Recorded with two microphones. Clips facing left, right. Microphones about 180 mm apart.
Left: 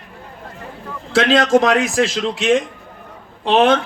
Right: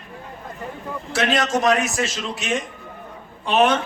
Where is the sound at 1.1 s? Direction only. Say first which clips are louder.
Left 8 dB; 90° left.